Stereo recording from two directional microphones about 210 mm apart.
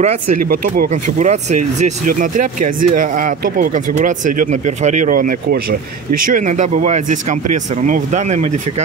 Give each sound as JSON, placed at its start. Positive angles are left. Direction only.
{"t": 0.0, "sound": "speech", "side_deg": -35}